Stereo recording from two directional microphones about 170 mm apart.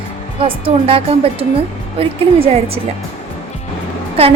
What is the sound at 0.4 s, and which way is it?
A woman's voice, 35° right (ahead or behind).